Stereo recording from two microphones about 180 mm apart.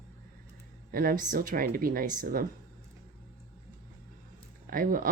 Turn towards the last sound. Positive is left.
turn(degrees=-50)  # may be behind; listen again after turning